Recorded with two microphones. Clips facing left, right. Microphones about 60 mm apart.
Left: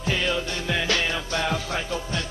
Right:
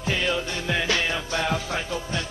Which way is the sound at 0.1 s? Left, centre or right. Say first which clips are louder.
Even; centre.